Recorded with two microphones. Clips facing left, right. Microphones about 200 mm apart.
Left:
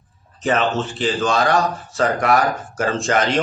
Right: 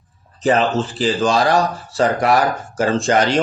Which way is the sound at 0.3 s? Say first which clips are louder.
Right 3 dB; 35° right (ahead or behind).